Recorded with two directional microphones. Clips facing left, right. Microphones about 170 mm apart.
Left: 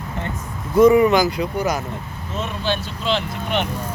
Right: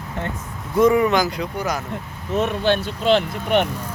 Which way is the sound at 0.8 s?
5° left (ahead or behind).